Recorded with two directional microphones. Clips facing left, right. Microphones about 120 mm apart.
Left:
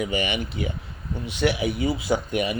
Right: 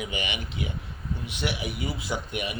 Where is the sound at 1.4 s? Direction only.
90° left.